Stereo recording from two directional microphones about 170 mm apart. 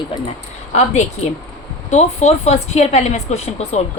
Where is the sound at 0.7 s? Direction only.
40° left (ahead or behind).